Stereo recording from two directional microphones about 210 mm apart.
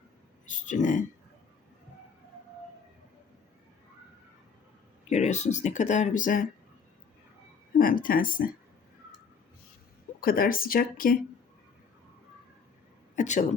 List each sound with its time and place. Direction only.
0.4 s speech: 35° left (ahead or behind)
5.0 s speech: 35° left (ahead or behind)
7.8 s speech: 40° left (ahead or behind)
10.2 s speech: 45° left (ahead or behind)
13.1 s speech: 35° left (ahead or behind)